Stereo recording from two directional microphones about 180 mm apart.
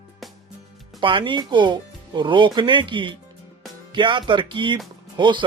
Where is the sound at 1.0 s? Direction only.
25° right (ahead or behind).